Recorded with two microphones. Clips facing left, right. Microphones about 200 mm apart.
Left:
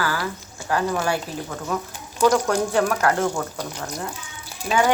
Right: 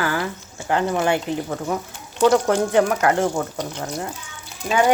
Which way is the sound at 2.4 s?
20° right (ahead or behind).